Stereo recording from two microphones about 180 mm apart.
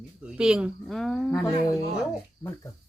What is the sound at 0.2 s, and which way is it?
Speech, 5° right (ahead or behind).